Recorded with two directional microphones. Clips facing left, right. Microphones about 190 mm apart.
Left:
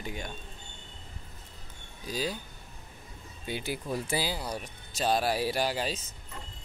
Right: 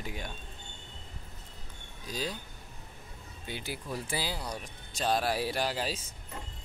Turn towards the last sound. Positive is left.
turn(degrees=-5)  # may be behind; listen again after turning